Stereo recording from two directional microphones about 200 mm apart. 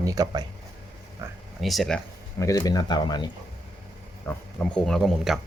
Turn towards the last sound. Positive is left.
turn(degrees=0)  # may be behind; listen again after turning